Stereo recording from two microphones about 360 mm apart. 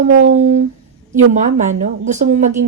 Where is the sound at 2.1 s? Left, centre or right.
Right.